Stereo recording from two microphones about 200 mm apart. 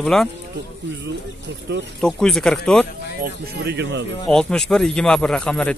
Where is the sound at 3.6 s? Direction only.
60° right (ahead or behind).